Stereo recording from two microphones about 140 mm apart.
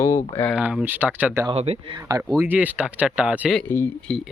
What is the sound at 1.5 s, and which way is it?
Speech, 45° right (ahead or behind).